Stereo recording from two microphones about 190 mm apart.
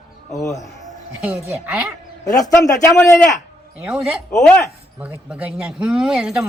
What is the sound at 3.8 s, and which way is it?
Speech, 5° right (ahead or behind).